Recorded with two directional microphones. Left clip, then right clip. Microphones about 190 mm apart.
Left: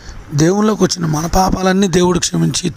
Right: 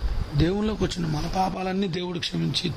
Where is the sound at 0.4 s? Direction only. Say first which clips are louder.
Left 12 dB; 40° left (ahead or behind).